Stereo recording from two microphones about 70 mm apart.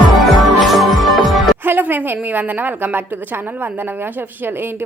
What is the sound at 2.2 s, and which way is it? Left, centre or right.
A woman's voice, right.